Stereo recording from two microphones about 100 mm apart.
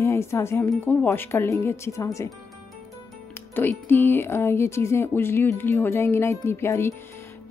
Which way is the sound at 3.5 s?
20° left (ahead or behind).